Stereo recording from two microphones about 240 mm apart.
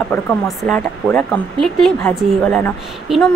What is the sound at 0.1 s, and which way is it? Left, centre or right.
Speech, centre.